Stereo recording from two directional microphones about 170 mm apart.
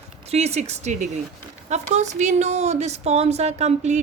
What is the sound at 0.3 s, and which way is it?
Speech, 40° right (ahead or behind).